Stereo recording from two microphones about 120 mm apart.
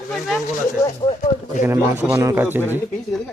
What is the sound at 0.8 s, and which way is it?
Speech, 30° left (ahead or behind).